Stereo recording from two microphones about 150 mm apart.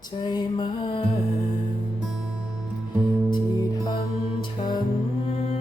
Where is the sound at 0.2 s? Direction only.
30° left (ahead or behind).